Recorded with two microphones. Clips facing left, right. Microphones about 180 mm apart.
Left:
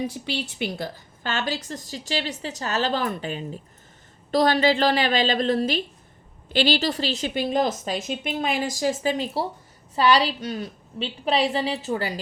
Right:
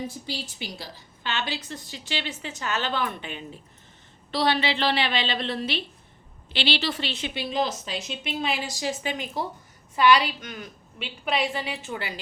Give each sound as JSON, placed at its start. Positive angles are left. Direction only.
{"t": 0.1, "sound": "a woman's voice", "side_deg": 65}